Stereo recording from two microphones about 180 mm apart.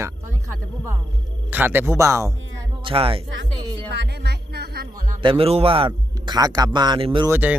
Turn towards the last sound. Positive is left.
turn(degrees=-10)  # may be behind; listen again after turning